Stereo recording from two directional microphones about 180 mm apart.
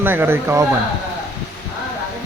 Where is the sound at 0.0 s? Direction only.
10° right (ahead or behind).